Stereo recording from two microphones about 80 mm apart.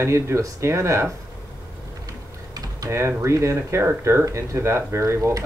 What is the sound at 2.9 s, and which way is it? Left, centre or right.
Speech, right.